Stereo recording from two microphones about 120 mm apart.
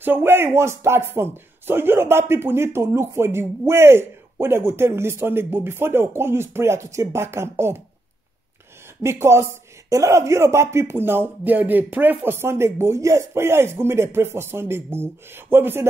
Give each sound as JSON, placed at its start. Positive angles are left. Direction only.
{"t": 0.0, "sound": "speech", "side_deg": -15}
{"t": 9.0, "sound": "speech", "side_deg": -20}